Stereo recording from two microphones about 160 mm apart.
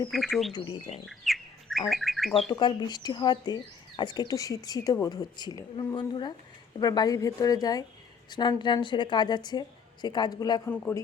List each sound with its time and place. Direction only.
0.1 s speech: centre (ahead or behind)
0.5 s speech: 25° left (ahead or behind)
1.0 s bird: centre (ahead or behind)
2.5 s speech: 25° left (ahead or behind)
10.7 s a man's voice: 15° left (ahead or behind)